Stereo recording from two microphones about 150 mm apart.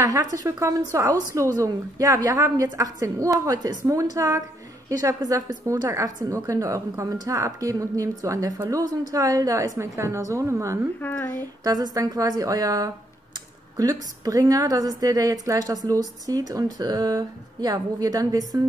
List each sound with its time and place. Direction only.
0.0 s a woman's voice: 25° right (ahead or behind)
11.0 s speech: 15° left (ahead or behind)
11.6 s a woman's voice: 25° right (ahead or behind)